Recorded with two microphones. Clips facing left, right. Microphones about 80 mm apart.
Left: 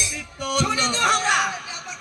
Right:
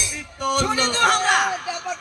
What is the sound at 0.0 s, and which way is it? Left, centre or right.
Music, right.